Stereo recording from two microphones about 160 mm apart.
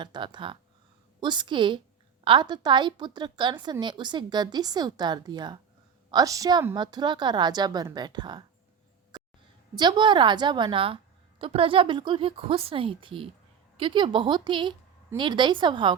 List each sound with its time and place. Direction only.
0.0 s a woman's voice: 30° right (ahead or behind)
9.7 s a woman's voice: 30° right (ahead or behind)